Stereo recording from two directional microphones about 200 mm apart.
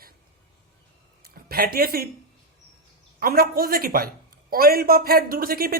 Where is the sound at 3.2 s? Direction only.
50° right (ahead or behind).